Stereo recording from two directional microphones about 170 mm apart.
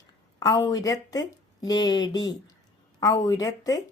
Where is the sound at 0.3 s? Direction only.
20° left (ahead or behind).